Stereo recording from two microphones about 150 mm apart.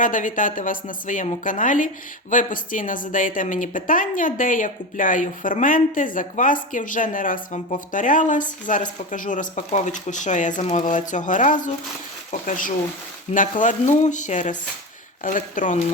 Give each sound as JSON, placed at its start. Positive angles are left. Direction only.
{"t": 0.0, "sound": "a woman's voice", "side_deg": 60}